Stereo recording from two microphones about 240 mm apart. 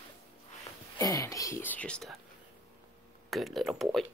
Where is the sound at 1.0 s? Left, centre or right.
Centre.